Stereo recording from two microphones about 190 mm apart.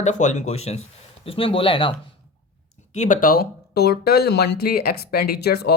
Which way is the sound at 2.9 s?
40° left (ahead or behind).